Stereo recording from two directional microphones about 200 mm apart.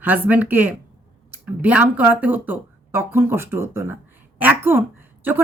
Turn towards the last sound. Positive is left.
turn(degrees=-10)  # may be behind; listen again after turning